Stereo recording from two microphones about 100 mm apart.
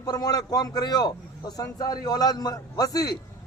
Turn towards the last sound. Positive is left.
turn(degrees=40)  # may be behind; listen again after turning